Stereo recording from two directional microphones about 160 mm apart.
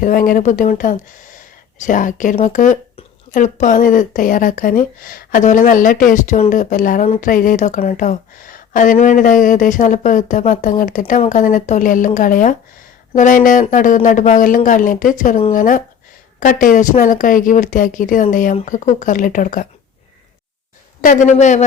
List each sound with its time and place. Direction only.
0.0 s a woman's voice: 60° left (ahead or behind)
21.0 s a woman's voice: 55° left (ahead or behind)